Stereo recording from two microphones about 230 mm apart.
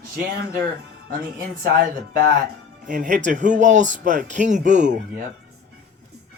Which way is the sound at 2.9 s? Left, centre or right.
Right.